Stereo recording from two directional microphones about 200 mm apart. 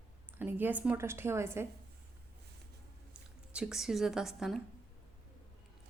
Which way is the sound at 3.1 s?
5° right (ahead or behind).